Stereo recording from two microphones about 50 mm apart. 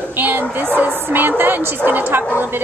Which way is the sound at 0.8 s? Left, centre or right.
Right.